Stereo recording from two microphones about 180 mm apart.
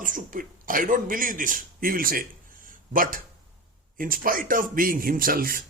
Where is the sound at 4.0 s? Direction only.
50° right (ahead or behind).